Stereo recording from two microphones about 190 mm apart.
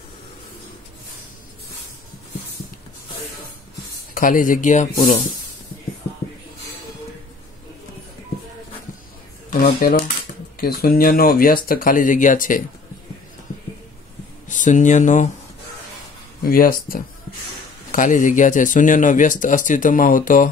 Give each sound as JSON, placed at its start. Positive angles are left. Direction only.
{"t": 4.1, "sound": "speech", "side_deg": 45}
{"t": 9.5, "sound": "speech", "side_deg": 45}
{"t": 14.5, "sound": "speech", "side_deg": 40}
{"t": 16.4, "sound": "speech", "side_deg": 50}